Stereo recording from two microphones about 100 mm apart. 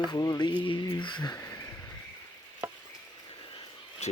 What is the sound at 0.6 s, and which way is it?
Speech, 55° left (ahead or behind).